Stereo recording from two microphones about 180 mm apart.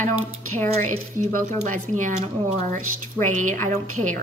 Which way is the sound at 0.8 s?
45° right (ahead or behind).